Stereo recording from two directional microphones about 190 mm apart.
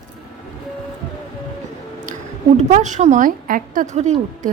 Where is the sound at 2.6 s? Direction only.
40° right (ahead or behind).